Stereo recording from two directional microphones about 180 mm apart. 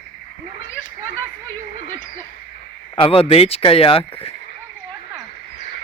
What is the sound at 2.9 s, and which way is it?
Speech, 30° left (ahead or behind).